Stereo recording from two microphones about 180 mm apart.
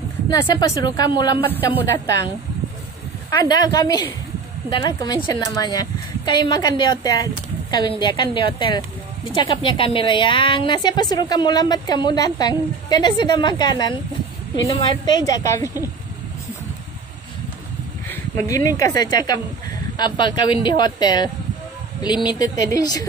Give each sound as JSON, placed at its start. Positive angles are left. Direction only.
{"t": 0.3, "sound": "a woman's voice", "side_deg": 25}
{"t": 3.4, "sound": "a woman's voice", "side_deg": 20}
{"t": 18.0, "sound": "a woman's voice", "side_deg": 10}